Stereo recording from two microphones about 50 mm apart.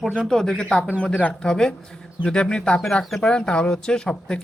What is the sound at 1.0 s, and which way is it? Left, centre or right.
Speech, left.